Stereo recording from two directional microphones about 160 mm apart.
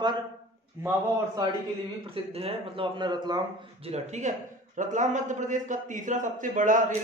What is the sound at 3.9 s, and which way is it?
A man's voice, 50° right (ahead or behind).